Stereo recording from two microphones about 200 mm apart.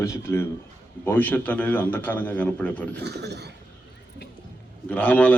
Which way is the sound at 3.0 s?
55° right (ahead or behind).